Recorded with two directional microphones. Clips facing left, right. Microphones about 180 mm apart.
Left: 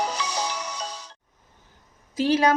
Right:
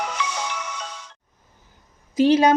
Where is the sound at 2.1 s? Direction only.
20° right (ahead or behind).